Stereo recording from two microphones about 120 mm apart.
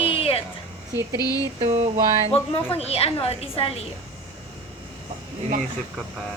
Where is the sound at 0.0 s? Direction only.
50° left (ahead or behind).